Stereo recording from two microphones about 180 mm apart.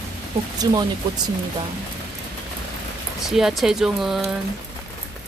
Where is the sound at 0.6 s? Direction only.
25° right (ahead or behind).